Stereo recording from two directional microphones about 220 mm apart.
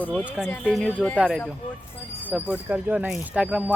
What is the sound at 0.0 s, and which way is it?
Speech, 5° left (ahead or behind).